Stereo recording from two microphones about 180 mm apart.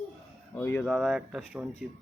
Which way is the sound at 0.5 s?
10° left (ahead or behind).